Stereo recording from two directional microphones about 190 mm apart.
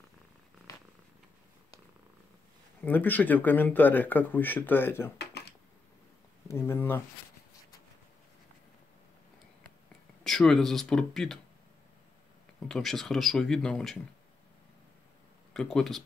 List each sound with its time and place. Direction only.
0.7 s purr: 15° left (ahead or behind)
2.8 s speech: 10° left (ahead or behind)
5.2 s a sound: 60° left (ahead or behind)
6.4 s speech: 15° left (ahead or behind)
10.2 s speech: 5° left (ahead or behind)
12.6 s speech: centre (ahead or behind)
15.5 s speech: centre (ahead or behind)